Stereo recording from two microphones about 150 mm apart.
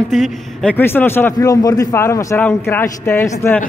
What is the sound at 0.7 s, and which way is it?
Speech, 15° left (ahead or behind).